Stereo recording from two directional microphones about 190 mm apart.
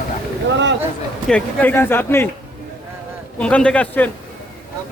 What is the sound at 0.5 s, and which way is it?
Speech, 70° right (ahead or behind).